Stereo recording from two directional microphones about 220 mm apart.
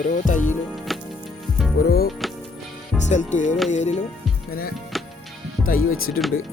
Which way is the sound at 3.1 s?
35° left (ahead or behind).